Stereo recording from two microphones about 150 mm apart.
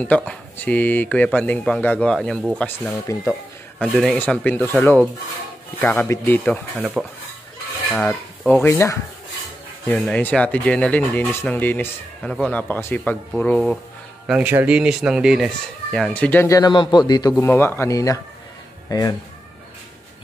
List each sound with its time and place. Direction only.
0.0 s speech: 10° left (ahead or behind)
3.1 s a man's voice: 20° left (ahead or behind)
3.8 s speech: 5° left (ahead or behind)
6.8 s dishes: 10° right (ahead or behind)
7.9 s filing: 5° left (ahead or behind)
8.6 s a man's voice: 20° left (ahead or behind)
9.8 s speech: 10° left (ahead or behind)
14.2 s speech: 10° right (ahead or behind)
16.2 s speech: 10° left (ahead or behind)
16.4 s a man's voice: 25° left (ahead or behind)